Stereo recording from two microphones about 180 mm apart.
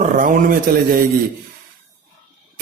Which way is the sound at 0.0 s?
45° right (ahead or behind).